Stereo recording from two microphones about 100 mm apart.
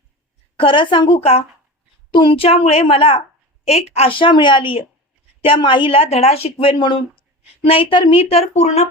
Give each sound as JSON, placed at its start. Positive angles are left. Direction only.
{"t": 0.5, "sound": "a woman's voice", "side_deg": 60}
{"t": 1.2, "sound": "speech", "side_deg": 80}
{"t": 2.1, "sound": "a woman's voice", "side_deg": 60}
{"t": 7.6, "sound": "speech", "side_deg": 65}